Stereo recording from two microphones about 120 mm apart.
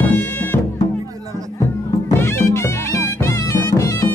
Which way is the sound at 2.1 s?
20° left (ahead or behind).